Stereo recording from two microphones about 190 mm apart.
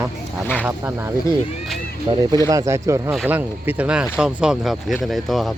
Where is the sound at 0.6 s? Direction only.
10° right (ahead or behind).